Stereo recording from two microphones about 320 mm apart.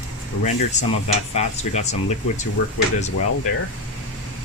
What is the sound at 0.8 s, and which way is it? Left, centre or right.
Speech, left.